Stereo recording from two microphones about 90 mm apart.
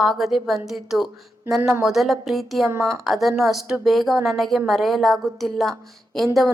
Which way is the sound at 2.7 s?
35° right (ahead or behind).